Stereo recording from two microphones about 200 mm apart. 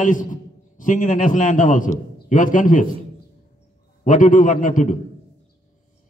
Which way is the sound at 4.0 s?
40° left (ahead or behind).